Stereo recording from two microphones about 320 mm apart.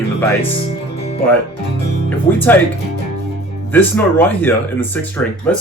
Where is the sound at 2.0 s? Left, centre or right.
Centre.